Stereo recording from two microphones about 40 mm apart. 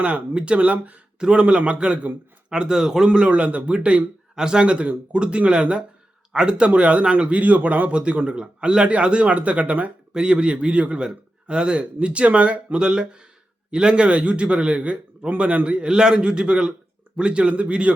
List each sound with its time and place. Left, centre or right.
0.0 s speech: right
1.2 s a man's voice: right
3.1 s a man's voice: right
7.9 s a man's voice: right
12.8 s a man's voice: right